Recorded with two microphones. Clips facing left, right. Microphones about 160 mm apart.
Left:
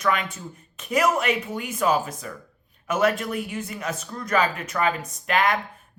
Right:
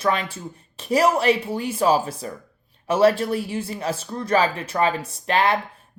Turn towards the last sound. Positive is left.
turn(degrees=-30)  # may be behind; listen again after turning